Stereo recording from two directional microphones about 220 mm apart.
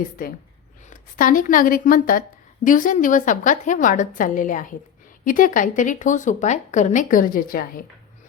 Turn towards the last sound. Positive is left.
turn(degrees=40)  # may be behind; listen again after turning